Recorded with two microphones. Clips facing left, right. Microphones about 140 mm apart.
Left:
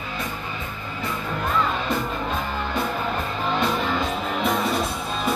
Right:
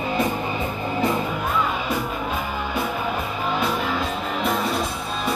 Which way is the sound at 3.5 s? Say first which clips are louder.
Left 1 dB; 5° right (ahead or behind).